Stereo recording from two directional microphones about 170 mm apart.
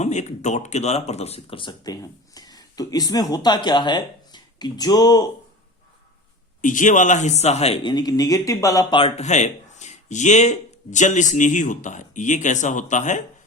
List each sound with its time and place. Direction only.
0.0 s speech: 45° left (ahead or behind); by 5.3 s 20° left (ahead or behind)
6.6 s speech: 50° left (ahead or behind)
7.9 s speech: 25° left (ahead or behind); by 13.2 s 45° left (ahead or behind)